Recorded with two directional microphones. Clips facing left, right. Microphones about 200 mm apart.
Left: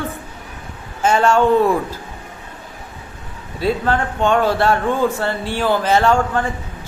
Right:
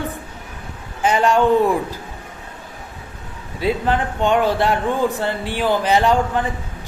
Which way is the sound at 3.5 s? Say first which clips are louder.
Left 1 dB; 15° right (ahead or behind).